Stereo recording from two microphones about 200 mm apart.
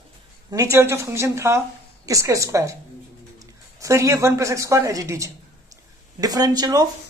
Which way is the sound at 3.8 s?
15° right (ahead or behind).